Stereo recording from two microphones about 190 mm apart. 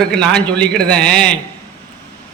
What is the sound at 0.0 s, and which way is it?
A man's voice, 5° left (ahead or behind).